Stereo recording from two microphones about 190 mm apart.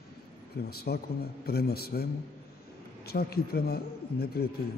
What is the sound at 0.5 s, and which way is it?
A man's voice, 55° left (ahead or behind).